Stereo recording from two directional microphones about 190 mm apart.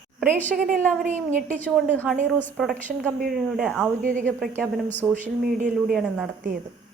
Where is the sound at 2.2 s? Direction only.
10° left (ahead or behind).